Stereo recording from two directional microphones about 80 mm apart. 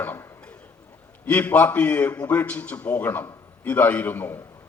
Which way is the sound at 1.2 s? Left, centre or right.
Centre.